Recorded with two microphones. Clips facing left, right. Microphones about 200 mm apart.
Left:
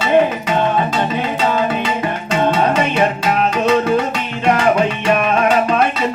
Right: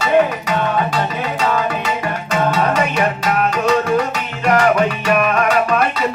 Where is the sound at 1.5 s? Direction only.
30° left (ahead or behind).